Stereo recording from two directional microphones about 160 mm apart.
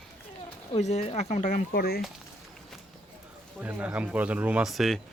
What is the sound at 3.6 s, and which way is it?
Speech, 10° right (ahead or behind).